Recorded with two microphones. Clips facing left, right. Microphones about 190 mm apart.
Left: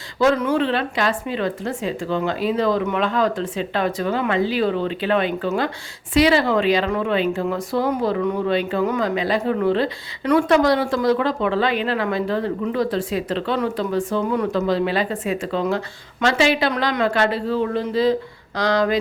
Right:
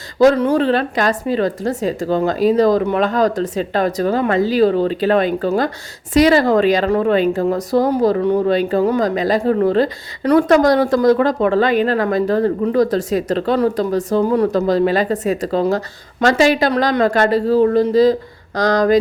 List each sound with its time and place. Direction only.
0.2 s speech: 35° right (ahead or behind)